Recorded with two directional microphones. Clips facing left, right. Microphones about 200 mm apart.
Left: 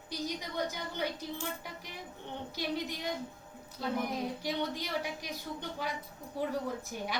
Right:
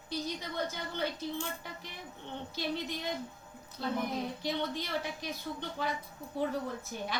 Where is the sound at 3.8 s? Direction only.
10° left (ahead or behind).